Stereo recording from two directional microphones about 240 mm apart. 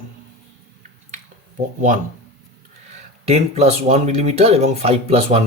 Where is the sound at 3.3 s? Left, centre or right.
Right.